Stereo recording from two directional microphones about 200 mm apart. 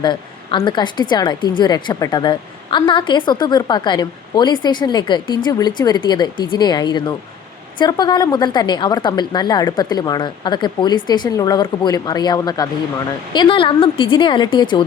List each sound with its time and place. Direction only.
0.0 s a woman's voice: 25° left (ahead or behind)